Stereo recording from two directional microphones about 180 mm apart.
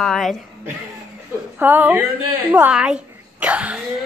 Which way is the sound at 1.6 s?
10° right (ahead or behind).